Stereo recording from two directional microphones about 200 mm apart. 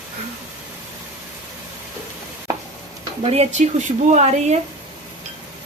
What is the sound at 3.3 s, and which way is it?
A woman's voice, 35° right (ahead or behind).